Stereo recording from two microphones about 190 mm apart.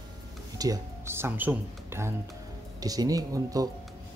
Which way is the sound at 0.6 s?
15° right (ahead or behind).